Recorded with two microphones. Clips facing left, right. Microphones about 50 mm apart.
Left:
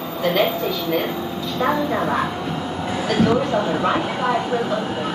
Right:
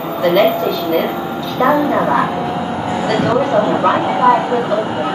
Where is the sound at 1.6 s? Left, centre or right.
Right.